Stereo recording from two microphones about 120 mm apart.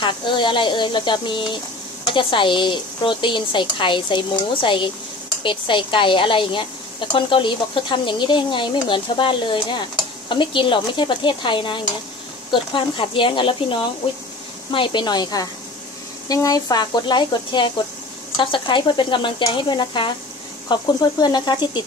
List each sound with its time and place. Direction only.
0.0 s a woman's voice: 40° left (ahead or behind)